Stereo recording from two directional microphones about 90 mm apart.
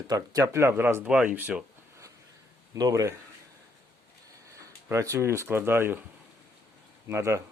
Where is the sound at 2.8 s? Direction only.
45° right (ahead or behind).